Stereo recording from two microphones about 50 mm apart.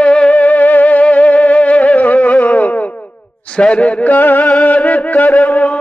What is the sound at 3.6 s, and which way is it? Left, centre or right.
Speech, left.